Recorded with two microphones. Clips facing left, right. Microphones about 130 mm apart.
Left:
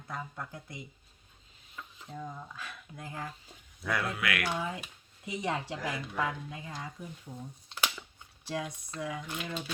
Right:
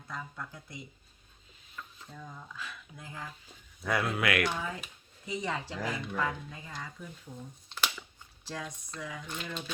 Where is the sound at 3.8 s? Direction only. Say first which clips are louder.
Right 3 dB; 25° right (ahead or behind).